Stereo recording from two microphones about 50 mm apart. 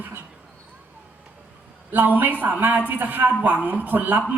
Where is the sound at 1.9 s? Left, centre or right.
Right.